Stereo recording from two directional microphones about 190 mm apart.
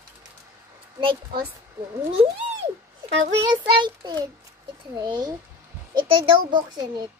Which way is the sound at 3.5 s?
25° right (ahead or behind).